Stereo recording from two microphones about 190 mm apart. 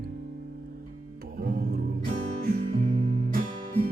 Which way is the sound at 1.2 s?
50° right (ahead or behind).